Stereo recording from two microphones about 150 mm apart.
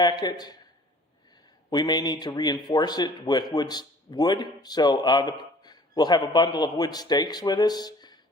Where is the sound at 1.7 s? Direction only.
30° left (ahead or behind).